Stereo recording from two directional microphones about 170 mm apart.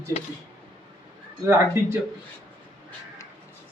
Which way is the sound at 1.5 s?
15° right (ahead or behind).